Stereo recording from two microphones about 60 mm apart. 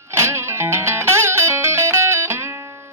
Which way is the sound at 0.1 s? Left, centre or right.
Right.